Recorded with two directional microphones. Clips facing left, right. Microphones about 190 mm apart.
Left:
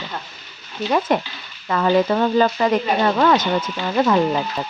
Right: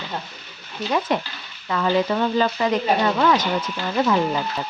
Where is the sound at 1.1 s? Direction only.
50° left (ahead or behind).